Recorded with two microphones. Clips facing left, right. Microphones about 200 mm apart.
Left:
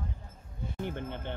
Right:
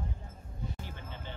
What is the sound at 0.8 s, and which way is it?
Music, 60° left (ahead or behind).